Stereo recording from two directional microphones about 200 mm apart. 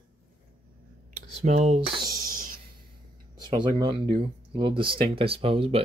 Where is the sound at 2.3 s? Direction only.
45° right (ahead or behind).